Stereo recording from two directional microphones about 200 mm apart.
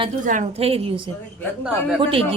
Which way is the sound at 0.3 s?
35° right (ahead or behind).